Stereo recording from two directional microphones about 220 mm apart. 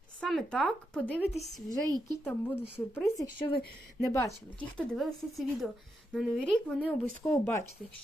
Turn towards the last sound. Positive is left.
turn(degrees=10)  # may be behind; listen again after turning